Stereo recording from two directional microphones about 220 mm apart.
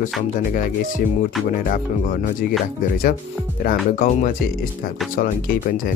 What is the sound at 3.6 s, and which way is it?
Speech, 40° left (ahead or behind).